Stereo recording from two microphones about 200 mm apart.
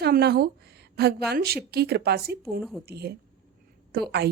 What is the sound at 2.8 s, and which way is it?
A woman's voice, 55° right (ahead or behind).